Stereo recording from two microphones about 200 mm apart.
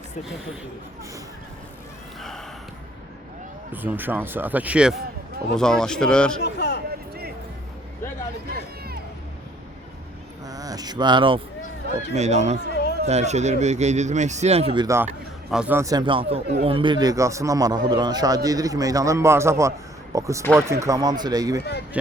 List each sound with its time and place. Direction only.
3.7 s speech: 10° right (ahead or behind)
6.4 s a sound: 55° left (ahead or behind)
10.4 s a man's voice: 20° right (ahead or behind); by 12.5 s 35° right (ahead or behind)
12.6 s chatter: 55° left (ahead or behind)
13.1 s speech: 35° right (ahead or behind)
14.8 s a man's voice: 10° right (ahead or behind)
21.6 s speech: 55° left (ahead or behind)